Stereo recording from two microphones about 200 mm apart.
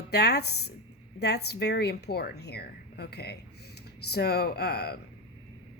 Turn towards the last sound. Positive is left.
turn(degrees=55)  # may be behind; listen again after turning